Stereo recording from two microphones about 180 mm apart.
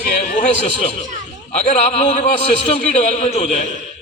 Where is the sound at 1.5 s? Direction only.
35° left (ahead or behind).